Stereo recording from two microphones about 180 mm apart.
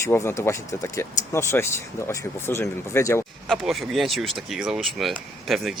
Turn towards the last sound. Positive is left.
turn(degrees=0)  # may be behind; listen again after turning